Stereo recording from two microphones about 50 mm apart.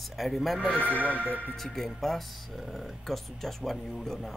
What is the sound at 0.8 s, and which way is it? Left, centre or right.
Speech, right.